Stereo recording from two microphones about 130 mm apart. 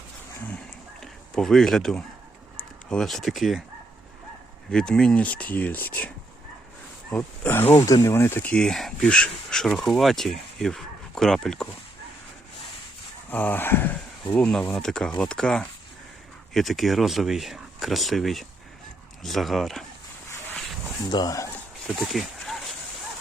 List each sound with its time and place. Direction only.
1.0 s speech: 5° left (ahead or behind)
4.7 s speech: 5° left (ahead or behind)
7.1 s speech: 10° left (ahead or behind)
7.9 s speech: 25° left (ahead or behind); by 11.7 s 5° left (ahead or behind)
13.3 s speech: 15° left (ahead or behind)
14.3 s speech: 5° left (ahead or behind)
21.1 s speech: 30° left (ahead or behind)
21.9 s a sound: centre (ahead or behind)